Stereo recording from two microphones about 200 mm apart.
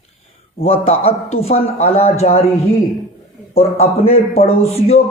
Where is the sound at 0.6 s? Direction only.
30° left (ahead or behind).